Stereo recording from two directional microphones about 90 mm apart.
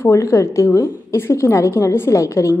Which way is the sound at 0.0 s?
35° left (ahead or behind).